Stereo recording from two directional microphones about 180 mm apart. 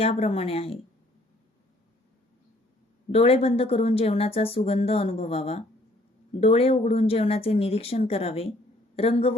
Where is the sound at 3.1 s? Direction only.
35° left (ahead or behind).